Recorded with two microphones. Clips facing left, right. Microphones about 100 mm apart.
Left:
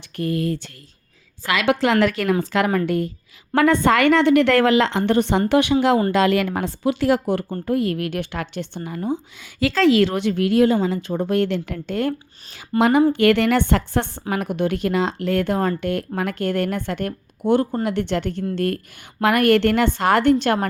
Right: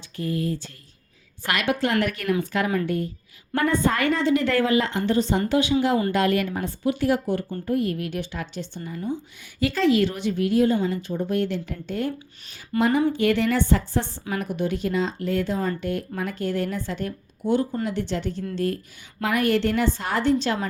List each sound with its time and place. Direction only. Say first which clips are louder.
0.2 s a woman's voice: left 4 dB; 70° left (ahead or behind)
1.6 s a woman's voice: left 6 dB; 90° left; by 5.7 s 70° left (ahead or behind)
6.1 s speech: left 4 dB; 90° left; by 12.1 s 75° left (ahead or behind)
12.7 s a woman's voice: left 4 dB; 35° left (ahead or behind)
13.1 s a woman's voice: left 5 dB; 75° left (ahead or behind)